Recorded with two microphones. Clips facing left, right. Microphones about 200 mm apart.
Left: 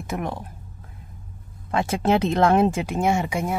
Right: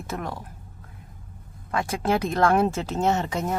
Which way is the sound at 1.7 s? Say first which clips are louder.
Left 3 dB; 25° left (ahead or behind).